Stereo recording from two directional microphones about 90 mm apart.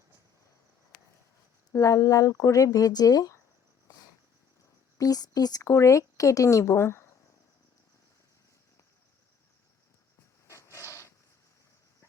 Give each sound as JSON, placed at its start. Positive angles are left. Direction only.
{"t": 1.7, "sound": "speech", "side_deg": 40}
{"t": 4.9, "sound": "speech", "side_deg": 45}
{"t": 10.4, "sound": "a sound", "side_deg": 35}